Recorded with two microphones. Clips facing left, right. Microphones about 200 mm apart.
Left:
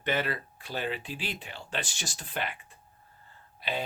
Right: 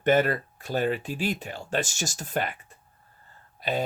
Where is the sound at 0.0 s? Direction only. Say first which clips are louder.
Right 9 dB; 45° right (ahead or behind).